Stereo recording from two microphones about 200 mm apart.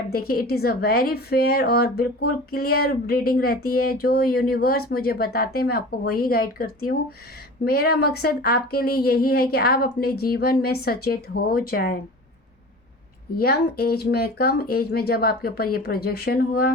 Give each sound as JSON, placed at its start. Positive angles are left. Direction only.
{"t": 0.1, "sound": "speech", "side_deg": 50}
{"t": 13.4, "sound": "speech", "side_deg": 50}